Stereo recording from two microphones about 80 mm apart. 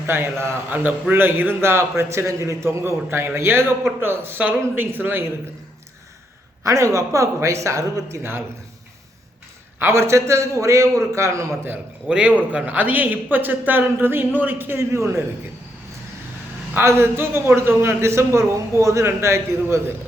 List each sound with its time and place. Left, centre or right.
0.1 s a man's voice: right
6.7 s a man's voice: right
8.2 s a man's voice: right
9.8 s a man's voice: right
12.0 s a man's voice: centre
12.3 s a man's voice: centre
12.6 s a man's voice: right
16.7 s a man's voice: right